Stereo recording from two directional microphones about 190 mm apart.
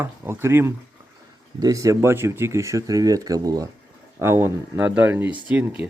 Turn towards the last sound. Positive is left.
turn(degrees=-10)  # may be behind; listen again after turning